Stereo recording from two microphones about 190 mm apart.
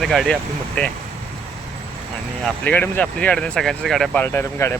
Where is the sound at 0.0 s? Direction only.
Centre (ahead or behind).